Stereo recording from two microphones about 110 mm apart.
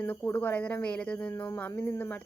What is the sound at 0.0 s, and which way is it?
Speech, 20° left (ahead or behind).